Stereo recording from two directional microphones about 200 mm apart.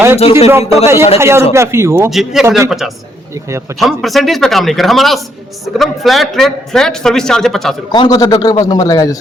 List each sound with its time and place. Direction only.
0.2 s a man's voice: 30° left (ahead or behind)
1.2 s speech: 15° right (ahead or behind)
2.0 s a man's voice: centre (ahead or behind)
7.9 s a man's voice: 20° left (ahead or behind)